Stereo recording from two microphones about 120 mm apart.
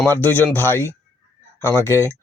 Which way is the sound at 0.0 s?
15° left (ahead or behind).